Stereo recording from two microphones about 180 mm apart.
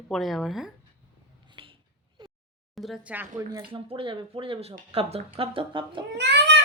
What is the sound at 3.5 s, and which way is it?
Speech, 25° right (ahead or behind).